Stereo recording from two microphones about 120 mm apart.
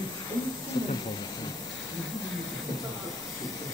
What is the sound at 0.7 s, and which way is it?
Speech, 35° left (ahead or behind).